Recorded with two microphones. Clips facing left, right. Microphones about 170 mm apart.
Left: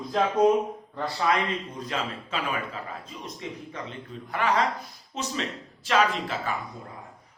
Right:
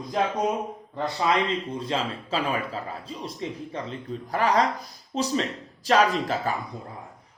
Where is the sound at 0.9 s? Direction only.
20° right (ahead or behind); by 6.5 s 40° right (ahead or behind).